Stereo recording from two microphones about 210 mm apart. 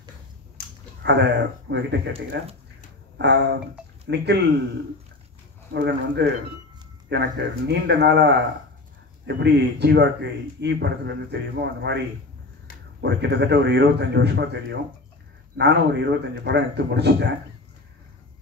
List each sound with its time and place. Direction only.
1.0 s a man's voice: 55° right (ahead or behind)
5.7 s a man's voice: 55° right (ahead or behind)
13.0 s a man's voice: 55° right (ahead or behind)